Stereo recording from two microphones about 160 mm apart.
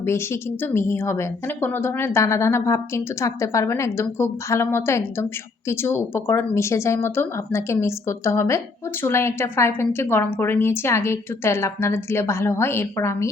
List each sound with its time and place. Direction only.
0.0 s a woman's voice: 15° left (ahead or behind)